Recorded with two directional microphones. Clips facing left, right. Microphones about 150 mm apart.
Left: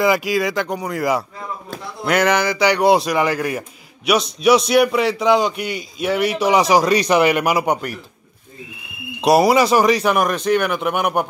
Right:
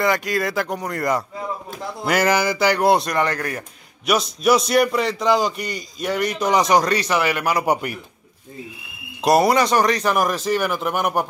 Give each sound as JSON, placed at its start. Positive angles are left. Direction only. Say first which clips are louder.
{"t": 0.0, "sound": "a man's voice", "louder": "left 3 dB", "side_deg": 5}
{"t": 7.0, "sound": "speech", "louder": "left 6 dB", "side_deg": 20}
{"t": 7.6, "sound": "a man's voice", "louder": "even", "side_deg": -10}
{"t": 9.2, "sound": "a man's voice", "louder": "left 3 dB", "side_deg": 0}